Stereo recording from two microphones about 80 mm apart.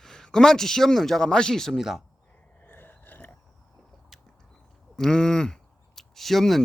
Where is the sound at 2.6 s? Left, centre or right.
Left.